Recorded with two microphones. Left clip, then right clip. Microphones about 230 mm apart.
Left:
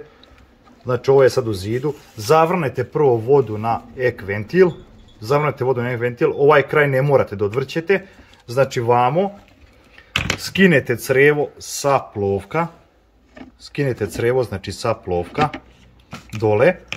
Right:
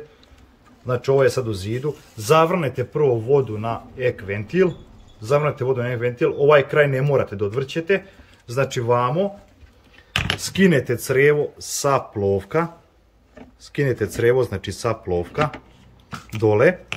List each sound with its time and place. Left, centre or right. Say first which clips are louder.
0.8 s speech: left 4 dB; centre
10.4 s speech: left 5 dB; centre
13.7 s speech: even; centre
16.3 s speech: left 1 dB; centre